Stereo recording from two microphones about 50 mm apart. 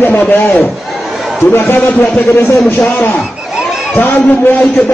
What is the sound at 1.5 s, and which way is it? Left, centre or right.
Speech, left.